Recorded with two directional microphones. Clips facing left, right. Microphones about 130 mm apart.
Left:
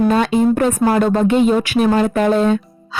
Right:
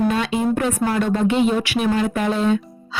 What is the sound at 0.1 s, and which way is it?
A woman's voice, 45° left (ahead or behind).